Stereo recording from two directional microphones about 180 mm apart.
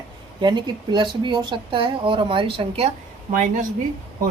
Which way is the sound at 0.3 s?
25° right (ahead or behind).